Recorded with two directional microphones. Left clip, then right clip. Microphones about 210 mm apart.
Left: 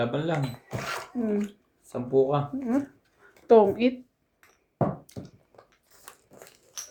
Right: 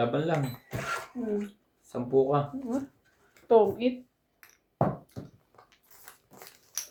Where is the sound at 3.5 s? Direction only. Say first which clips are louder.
Left 4 dB; 55° left (ahead or behind).